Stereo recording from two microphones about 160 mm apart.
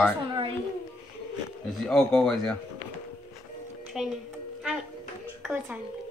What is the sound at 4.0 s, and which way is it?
Speech, 5° right (ahead or behind).